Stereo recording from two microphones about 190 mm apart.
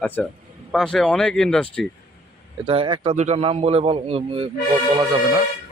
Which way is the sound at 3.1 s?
35° right (ahead or behind).